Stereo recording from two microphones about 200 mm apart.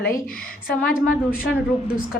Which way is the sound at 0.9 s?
45° left (ahead or behind).